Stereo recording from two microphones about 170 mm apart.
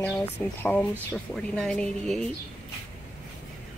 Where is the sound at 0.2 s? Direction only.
10° left (ahead or behind).